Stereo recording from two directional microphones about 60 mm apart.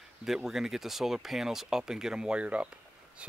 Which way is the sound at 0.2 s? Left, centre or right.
Centre.